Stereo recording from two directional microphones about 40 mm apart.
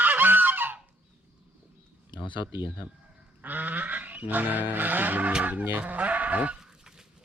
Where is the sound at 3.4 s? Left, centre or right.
Right.